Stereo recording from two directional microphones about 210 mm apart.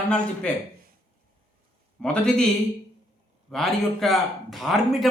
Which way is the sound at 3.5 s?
Centre (ahead or behind).